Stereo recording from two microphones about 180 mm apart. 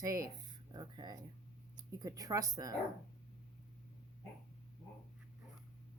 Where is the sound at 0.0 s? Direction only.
20° right (ahead or behind).